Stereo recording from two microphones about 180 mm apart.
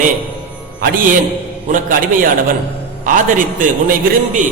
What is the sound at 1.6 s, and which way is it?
A man's voice, 50° right (ahead or behind).